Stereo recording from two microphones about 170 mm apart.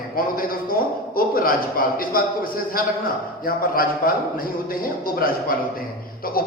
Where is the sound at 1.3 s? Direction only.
55° left (ahead or behind).